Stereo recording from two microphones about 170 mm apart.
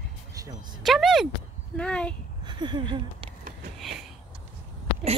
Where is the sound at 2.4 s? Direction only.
25° right (ahead or behind).